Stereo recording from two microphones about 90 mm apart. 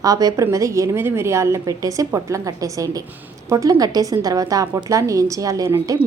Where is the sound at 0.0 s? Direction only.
40° right (ahead or behind).